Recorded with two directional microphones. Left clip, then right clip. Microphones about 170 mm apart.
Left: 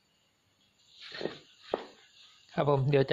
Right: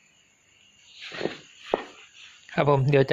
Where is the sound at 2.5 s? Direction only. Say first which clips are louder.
Right 6 dB; 5° left (ahead or behind).